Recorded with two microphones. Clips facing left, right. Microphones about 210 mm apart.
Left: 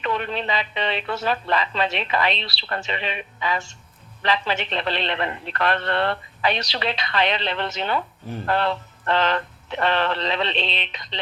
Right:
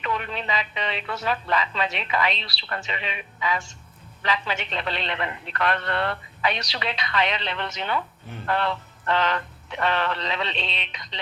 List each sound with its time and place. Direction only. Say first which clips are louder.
0.0 s a man's voice: left 4 dB; 35° left (ahead or behind)